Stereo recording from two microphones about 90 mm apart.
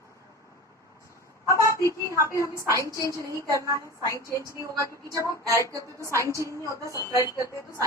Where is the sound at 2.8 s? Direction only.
35° left (ahead or behind).